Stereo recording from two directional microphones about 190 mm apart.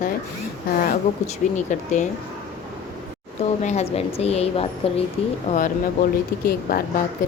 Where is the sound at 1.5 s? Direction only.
40° left (ahead or behind).